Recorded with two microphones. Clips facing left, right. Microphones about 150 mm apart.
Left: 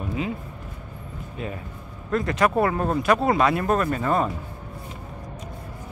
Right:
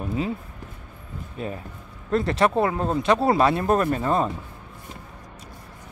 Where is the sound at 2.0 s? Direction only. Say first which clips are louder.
Right 1 dB; 30° right (ahead or behind).